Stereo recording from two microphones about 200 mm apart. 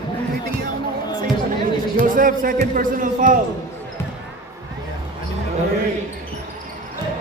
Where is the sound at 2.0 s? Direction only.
45° right (ahead or behind).